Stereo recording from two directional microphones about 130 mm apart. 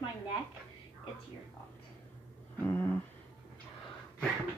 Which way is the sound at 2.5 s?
15° left (ahead or behind).